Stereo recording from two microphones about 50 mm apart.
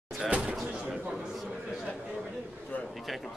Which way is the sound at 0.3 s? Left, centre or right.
Right.